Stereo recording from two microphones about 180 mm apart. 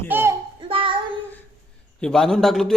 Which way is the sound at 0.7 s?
30° right (ahead or behind).